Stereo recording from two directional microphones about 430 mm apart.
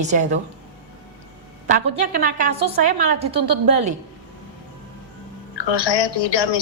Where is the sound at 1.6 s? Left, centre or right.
Centre.